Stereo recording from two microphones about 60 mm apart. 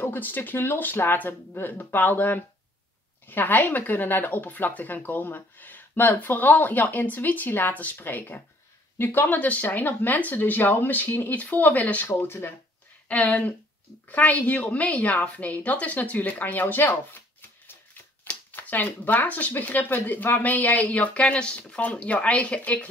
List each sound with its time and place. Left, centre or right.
0.0 s speech: left
12.2 s speech: left
13.1 s speech: left
18.5 s speech: left